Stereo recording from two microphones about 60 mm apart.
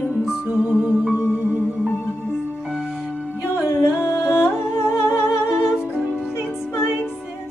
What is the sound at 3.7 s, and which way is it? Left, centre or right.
Music, left.